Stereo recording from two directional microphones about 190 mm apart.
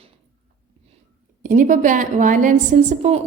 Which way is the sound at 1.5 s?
45° right (ahead or behind).